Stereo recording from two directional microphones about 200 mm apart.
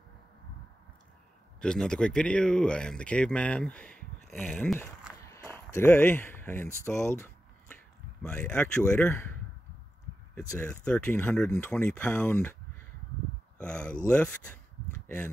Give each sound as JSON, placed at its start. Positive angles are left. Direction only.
{"t": 1.6, "sound": "speech", "side_deg": 5}
{"t": 5.2, "sound": "a sound", "side_deg": 15}
{"t": 6.9, "sound": "speech", "side_deg": 5}
{"t": 10.4, "sound": "speech", "side_deg": 15}
{"t": 10.7, "sound": "speech", "side_deg": 5}